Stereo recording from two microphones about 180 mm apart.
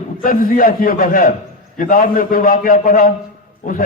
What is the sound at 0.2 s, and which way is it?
A man's voice, 50° left (ahead or behind).